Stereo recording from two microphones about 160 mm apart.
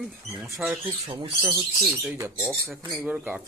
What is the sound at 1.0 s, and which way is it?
Speech, 30° right (ahead or behind).